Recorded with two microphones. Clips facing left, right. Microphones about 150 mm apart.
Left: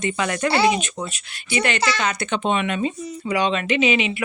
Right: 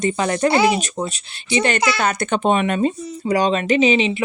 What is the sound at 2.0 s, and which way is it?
Speech, 50° right (ahead or behind).